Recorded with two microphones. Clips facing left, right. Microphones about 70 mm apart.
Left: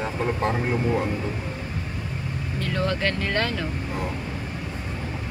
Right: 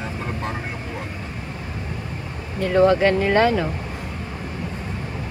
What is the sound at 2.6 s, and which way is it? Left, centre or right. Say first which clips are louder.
Speech: right 10 dB; centre.